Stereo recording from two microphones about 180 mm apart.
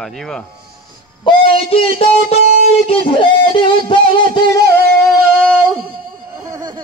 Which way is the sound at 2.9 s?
30° left (ahead or behind).